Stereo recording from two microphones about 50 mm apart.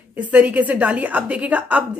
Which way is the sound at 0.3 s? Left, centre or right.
Right.